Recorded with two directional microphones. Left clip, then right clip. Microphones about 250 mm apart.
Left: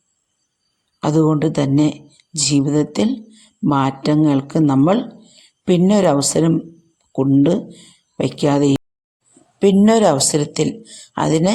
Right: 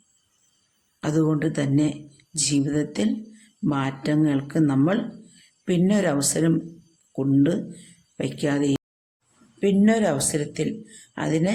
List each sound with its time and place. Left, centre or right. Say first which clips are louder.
1.0 s a man's voice: left 7 dB; left